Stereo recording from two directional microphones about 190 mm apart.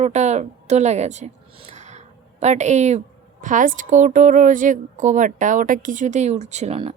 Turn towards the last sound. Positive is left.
turn(degrees=-30)  # may be behind; listen again after turning